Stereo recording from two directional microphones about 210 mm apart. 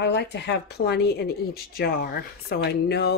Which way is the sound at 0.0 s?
55° left (ahead or behind).